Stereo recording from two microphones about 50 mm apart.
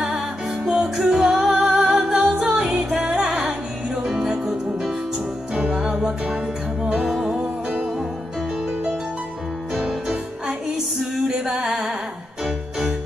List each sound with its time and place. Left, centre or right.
0.7 s music: centre
2.5 s music: right
11.0 s music: centre